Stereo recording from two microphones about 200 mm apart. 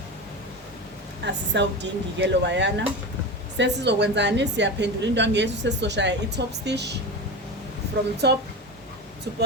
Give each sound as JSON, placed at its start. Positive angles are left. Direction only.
{"t": 1.2, "sound": "a woman's voice", "side_deg": -60}
{"t": 8.2, "sound": "a woman's voice", "side_deg": -55}